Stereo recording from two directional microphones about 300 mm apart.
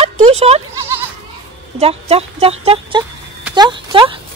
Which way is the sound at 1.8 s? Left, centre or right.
Centre.